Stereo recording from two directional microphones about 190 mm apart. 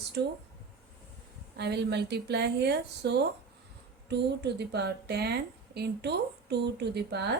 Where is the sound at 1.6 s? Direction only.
60° right (ahead or behind).